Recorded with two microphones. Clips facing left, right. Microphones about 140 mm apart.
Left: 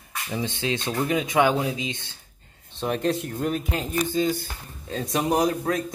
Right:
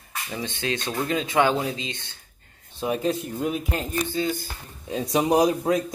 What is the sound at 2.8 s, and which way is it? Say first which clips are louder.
Speech: even; 5° right (ahead or behind).